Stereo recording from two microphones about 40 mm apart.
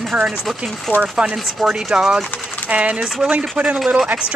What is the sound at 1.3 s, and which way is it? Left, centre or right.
Speech, centre.